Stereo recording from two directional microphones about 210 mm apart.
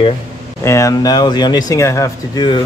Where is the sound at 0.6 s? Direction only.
15° left (ahead or behind).